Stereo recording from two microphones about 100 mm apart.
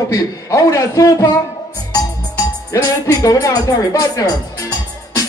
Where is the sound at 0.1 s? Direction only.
35° left (ahead or behind).